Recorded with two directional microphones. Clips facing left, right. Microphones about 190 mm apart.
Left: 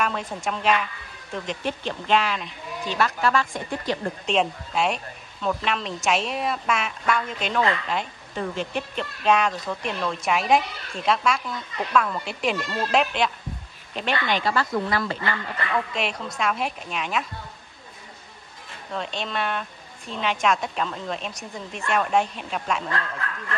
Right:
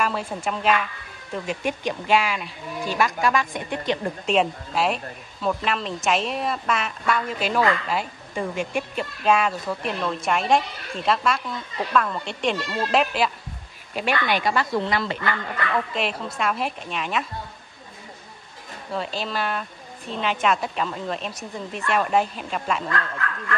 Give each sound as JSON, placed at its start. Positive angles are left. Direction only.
{"t": 0.0, "sound": "speech", "side_deg": -5}
{"t": 4.3, "sound": "speech", "side_deg": -5}
{"t": 15.7, "sound": "speech", "side_deg": 0}
{"t": 18.9, "sound": "speech", "side_deg": -5}